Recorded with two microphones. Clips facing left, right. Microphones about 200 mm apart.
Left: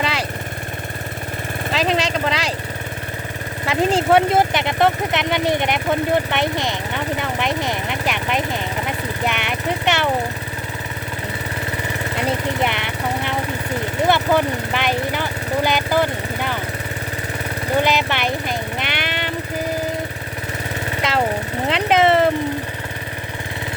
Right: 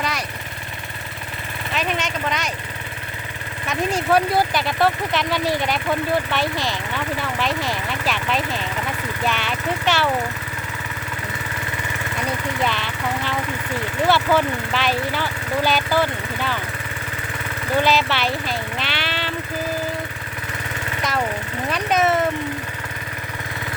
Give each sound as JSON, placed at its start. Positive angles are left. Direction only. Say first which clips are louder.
{"t": 0.0, "sound": "vehicle", "louder": "left 3 dB", "side_deg": 30}
{"t": 1.8, "sound": "speech", "louder": "left 5 dB", "side_deg": 35}
{"t": 3.7, "sound": "speech", "louder": "left 4 dB", "side_deg": 30}
{"t": 9.2, "sound": "vehicle", "louder": "left 1 dB", "side_deg": 20}
{"t": 12.1, "sound": "lawn mower", "louder": "left 4 dB", "side_deg": 25}
{"t": 14.1, "sound": "speech", "louder": "left 1 dB", "side_deg": 15}
{"t": 17.7, "sound": "jackhammer", "louder": "even", "side_deg": 15}
{"t": 21.0, "sound": "lawn mower", "louder": "left 3 dB", "side_deg": 25}
{"t": 21.7, "sound": "speech", "louder": "left 4 dB", "side_deg": 25}